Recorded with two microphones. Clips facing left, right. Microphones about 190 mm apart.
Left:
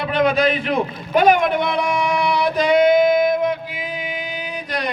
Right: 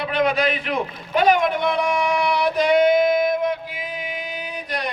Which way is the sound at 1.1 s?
50° left (ahead or behind).